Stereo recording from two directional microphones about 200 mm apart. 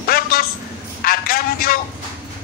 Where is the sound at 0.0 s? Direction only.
50° left (ahead or behind).